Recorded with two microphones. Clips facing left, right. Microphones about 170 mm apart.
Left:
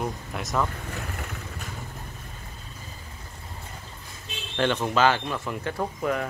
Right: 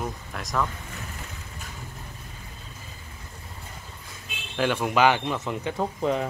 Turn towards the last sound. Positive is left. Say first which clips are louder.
# right 2 dB
turn(degrees=-20)  # may be behind; listen again after turning